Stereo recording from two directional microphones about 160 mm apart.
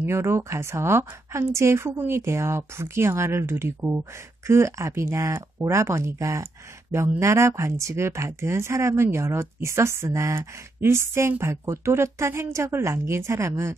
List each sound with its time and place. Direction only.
0.0 s speech: 15° right (ahead or behind)